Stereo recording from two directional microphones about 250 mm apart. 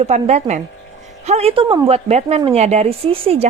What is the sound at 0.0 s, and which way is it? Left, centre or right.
Speech, right.